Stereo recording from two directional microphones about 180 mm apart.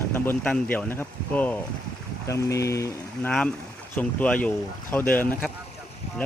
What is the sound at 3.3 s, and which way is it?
Speech, 5° left (ahead or behind).